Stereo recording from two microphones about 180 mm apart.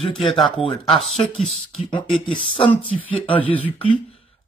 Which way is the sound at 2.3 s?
30° left (ahead or behind).